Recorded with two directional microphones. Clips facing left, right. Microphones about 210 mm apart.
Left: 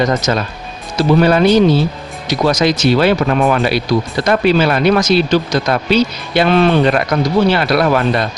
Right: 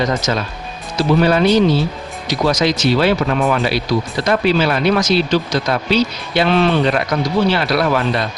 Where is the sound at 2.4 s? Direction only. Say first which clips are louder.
Left 3 dB; 50° left (ahead or behind).